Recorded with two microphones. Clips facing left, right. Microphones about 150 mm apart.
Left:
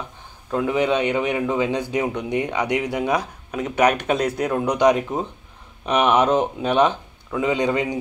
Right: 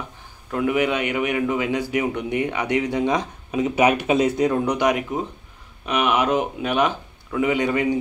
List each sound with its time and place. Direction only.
0.5 s a man's voice: 25° left (ahead or behind)
3.5 s speech: 5° right (ahead or behind)
4.6 s speech: 15° left (ahead or behind)
5.9 s a man's voice: 35° left (ahead or behind); by 8.0 s 20° left (ahead or behind)